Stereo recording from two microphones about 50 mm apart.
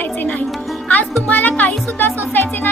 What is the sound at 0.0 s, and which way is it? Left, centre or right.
Music, left.